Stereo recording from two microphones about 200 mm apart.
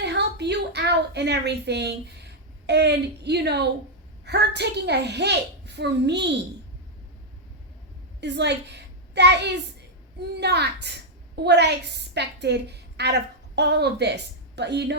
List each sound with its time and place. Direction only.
0.0 s a woman's voice: 55° right (ahead or behind)
8.2 s a woman's voice: 60° right (ahead or behind)